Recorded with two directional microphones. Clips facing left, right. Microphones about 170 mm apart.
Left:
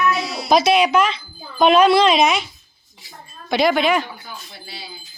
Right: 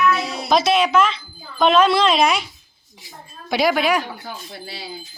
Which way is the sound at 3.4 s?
5° right (ahead or behind).